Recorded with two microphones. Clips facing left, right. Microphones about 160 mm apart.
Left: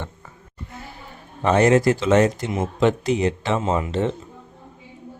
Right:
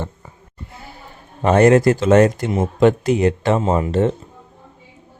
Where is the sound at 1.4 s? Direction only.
50° right (ahead or behind).